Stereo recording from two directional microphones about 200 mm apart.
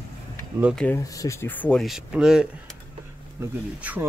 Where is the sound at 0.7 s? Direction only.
10° left (ahead or behind).